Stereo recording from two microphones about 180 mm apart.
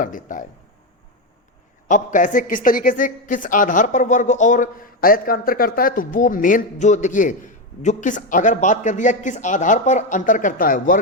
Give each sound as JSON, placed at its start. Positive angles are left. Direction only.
{"t": 0.0, "sound": "a man's voice", "side_deg": 45}
{"t": 1.9, "sound": "a man's voice", "side_deg": 45}